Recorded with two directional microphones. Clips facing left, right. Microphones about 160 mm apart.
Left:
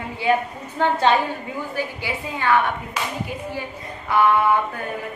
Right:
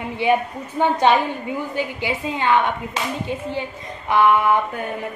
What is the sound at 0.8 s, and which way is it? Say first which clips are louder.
A woman's voice: right 2 dB; 15° right (ahead or behind).